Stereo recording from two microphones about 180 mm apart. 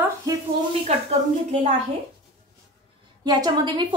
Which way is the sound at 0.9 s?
35° right (ahead or behind).